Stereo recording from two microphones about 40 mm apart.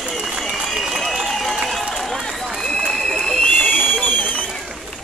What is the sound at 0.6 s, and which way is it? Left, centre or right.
Run, centre.